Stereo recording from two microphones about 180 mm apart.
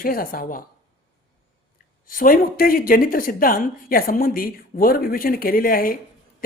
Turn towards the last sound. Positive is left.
turn(degrees=55)  # may be behind; listen again after turning